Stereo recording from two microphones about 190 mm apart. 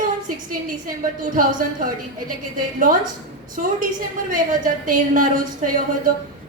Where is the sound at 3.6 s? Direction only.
40° right (ahead or behind).